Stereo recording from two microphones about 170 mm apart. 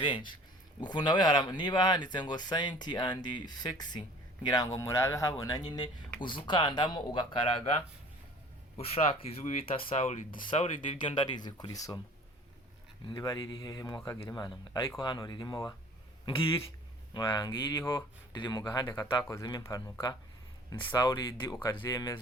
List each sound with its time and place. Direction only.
0.0 s speech: 30° left (ahead or behind)
8.8 s speech: 35° left (ahead or behind)
11.0 s speech: 25° left (ahead or behind)
13.1 s speech: 25° left (ahead or behind)